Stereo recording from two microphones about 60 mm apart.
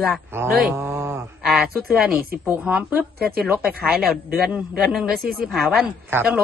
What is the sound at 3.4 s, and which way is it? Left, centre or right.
Speech, right.